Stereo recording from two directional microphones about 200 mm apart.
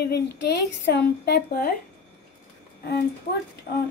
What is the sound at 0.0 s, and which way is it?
Speech, 55° left (ahead or behind).